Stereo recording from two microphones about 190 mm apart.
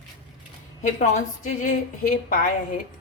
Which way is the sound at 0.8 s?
40° left (ahead or behind).